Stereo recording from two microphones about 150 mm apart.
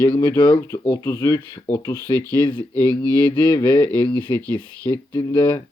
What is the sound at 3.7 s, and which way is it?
Speech, 10° left (ahead or behind).